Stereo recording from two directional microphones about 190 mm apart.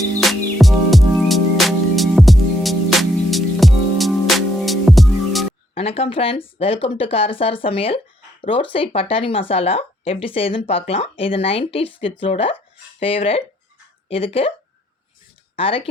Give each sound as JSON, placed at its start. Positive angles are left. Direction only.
{"t": 0.2, "sound": "music", "side_deg": 0}
{"t": 5.7, "sound": "speech", "side_deg": 30}
{"t": 15.5, "sound": "speech", "side_deg": 30}